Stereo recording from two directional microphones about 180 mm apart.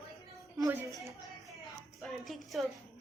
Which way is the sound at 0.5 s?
20° right (ahead or behind).